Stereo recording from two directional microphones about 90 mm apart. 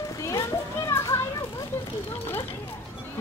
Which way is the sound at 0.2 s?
35° left (ahead or behind).